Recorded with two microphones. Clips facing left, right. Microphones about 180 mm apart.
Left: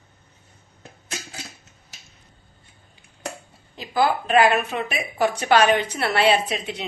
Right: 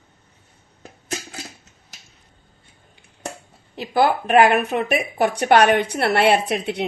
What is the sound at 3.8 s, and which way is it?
A woman's voice, 65° right (ahead or behind).